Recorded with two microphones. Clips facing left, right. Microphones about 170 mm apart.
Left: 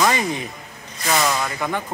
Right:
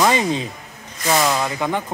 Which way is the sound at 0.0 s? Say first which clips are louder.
Right 3 dB; 20° right (ahead or behind).